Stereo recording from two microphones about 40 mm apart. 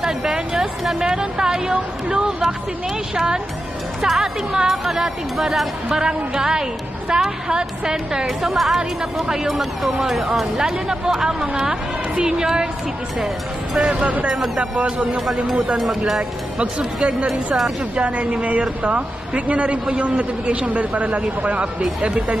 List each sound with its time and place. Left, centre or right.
0.0 s a sound: centre
4.0 s speech: centre
8.4 s a woman's voice: centre
10.1 s a woman's voice: centre
10.6 s speech: centre
13.7 s a woman's voice: right
16.2 s a woman's voice: right